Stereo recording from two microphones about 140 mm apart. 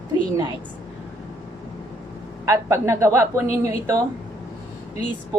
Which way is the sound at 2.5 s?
20° right (ahead or behind).